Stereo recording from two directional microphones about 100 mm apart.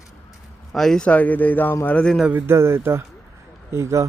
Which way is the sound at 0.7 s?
5° left (ahead or behind).